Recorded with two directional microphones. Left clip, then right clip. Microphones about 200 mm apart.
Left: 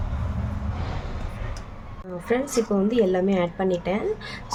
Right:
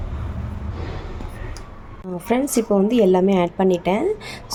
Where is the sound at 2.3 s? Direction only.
30° right (ahead or behind).